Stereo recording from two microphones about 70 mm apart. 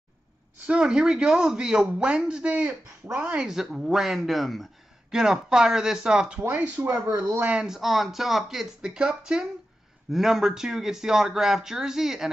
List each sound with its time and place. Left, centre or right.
0.7 s speech: centre
6.4 s speech: right
7.6 s speech: centre